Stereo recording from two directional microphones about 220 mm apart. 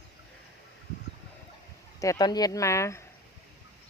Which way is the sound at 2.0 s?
15° left (ahead or behind).